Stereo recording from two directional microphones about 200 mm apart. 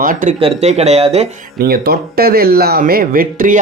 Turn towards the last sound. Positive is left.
turn(degrees=-40)  # may be behind; listen again after turning